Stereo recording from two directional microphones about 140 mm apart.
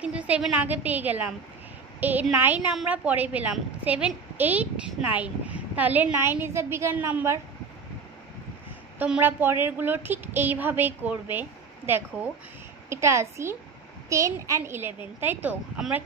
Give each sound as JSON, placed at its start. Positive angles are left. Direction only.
{"t": 0.0, "sound": "a woman's voice", "side_deg": -10}
{"t": 8.9, "sound": "a woman's voice", "side_deg": -10}